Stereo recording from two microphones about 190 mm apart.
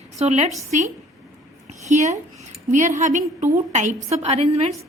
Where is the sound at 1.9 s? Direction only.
40° right (ahead or behind).